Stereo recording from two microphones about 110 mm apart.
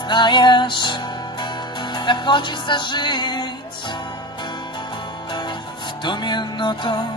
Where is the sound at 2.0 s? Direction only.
45° left (ahead or behind).